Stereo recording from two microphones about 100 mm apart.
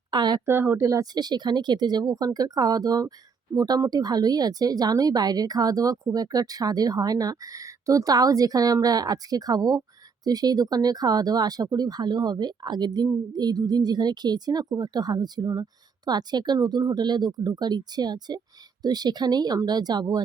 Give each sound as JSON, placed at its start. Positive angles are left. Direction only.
{"t": 0.1, "sound": "speech", "side_deg": -45}
{"t": 0.4, "sound": "speech", "side_deg": -20}
{"t": 0.9, "sound": "speech", "side_deg": -40}